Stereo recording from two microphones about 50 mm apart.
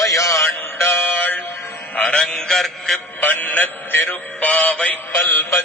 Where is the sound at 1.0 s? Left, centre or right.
Left.